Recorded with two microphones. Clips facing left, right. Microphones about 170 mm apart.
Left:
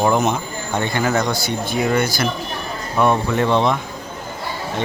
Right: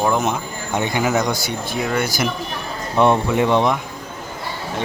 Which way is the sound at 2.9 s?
20° right (ahead or behind).